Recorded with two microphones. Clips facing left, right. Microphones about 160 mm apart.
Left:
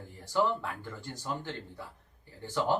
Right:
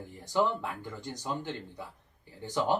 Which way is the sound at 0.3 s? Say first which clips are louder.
Right 1 dB; 15° right (ahead or behind).